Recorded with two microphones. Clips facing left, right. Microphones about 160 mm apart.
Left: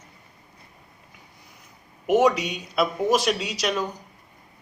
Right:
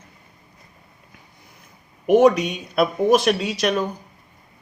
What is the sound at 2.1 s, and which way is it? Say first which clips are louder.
A man's voice: right 5 dB; 50° right (ahead or behind).